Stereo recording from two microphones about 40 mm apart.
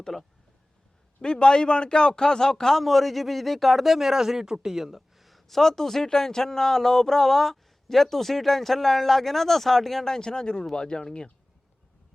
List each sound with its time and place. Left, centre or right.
0.1 s a man's voice: centre
1.2 s a man's voice: left